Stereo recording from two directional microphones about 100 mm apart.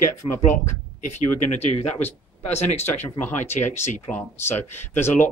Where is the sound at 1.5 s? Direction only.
90° left.